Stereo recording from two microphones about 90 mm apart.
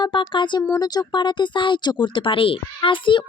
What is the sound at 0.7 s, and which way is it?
Speech, 45° left (ahead or behind).